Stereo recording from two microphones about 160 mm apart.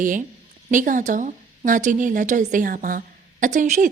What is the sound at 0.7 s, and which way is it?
A woman's voice, 55° right (ahead or behind).